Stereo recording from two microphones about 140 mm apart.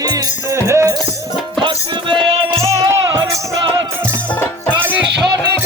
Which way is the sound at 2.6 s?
20° right (ahead or behind).